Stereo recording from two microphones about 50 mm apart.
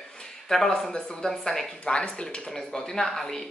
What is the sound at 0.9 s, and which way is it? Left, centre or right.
Speech, centre.